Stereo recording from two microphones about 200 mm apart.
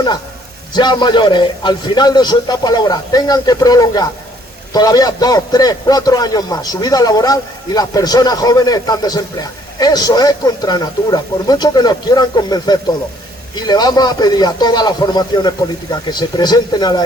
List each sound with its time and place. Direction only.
0.7 s a man's voice: 20° left (ahead or behind)